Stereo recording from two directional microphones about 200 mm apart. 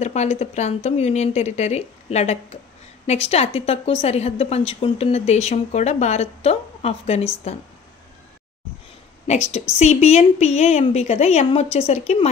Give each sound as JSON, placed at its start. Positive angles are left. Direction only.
{"t": 0.0, "sound": "a woman's voice", "side_deg": 35}
{"t": 9.3, "sound": "a woman's voice", "side_deg": 35}